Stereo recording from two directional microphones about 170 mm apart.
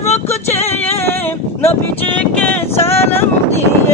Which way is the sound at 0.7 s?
15° left (ahead or behind).